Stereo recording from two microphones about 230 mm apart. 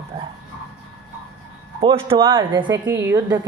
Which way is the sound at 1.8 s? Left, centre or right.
Right.